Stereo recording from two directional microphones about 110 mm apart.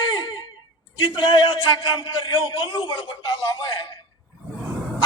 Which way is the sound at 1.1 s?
45° left (ahead or behind).